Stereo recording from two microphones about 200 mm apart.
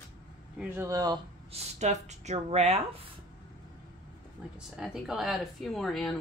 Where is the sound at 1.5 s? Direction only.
35° right (ahead or behind).